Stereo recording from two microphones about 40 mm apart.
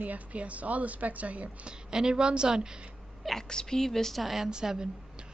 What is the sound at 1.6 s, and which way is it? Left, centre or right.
Speech, centre.